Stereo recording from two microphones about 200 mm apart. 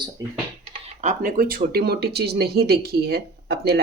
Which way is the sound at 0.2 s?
20° right (ahead or behind).